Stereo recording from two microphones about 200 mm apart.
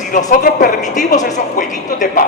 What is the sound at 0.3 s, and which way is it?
A man's voice, 40° left (ahead or behind).